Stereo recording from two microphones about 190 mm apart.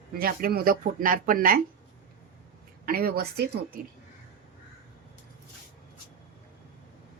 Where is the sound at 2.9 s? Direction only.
55° right (ahead or behind).